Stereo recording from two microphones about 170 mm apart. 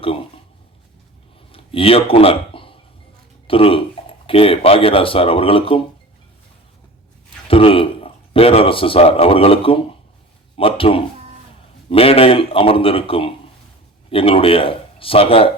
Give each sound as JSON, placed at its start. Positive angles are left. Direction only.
{"t": 1.5, "sound": "speech", "side_deg": 35}
{"t": 7.4, "sound": "speech", "side_deg": 35}